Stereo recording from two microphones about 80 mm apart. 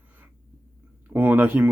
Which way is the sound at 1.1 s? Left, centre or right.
Right.